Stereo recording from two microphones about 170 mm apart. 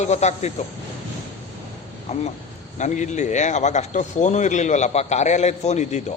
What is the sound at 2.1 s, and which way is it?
A man's voice, 40° left (ahead or behind).